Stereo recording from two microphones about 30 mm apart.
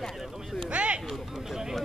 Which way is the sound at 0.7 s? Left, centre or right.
Right.